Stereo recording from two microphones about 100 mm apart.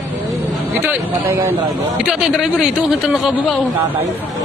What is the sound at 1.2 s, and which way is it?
Speech, 25° right (ahead or behind).